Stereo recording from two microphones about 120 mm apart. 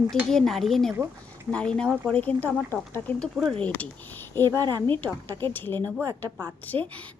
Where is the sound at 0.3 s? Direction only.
5° left (ahead or behind).